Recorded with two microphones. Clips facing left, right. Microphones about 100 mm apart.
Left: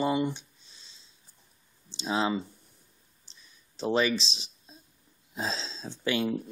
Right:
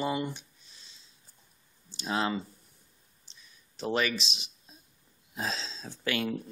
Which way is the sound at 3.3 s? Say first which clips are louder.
Even; 35° left (ahead or behind).